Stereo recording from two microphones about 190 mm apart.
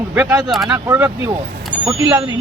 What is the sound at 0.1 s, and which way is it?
Speech, 10° right (ahead or behind).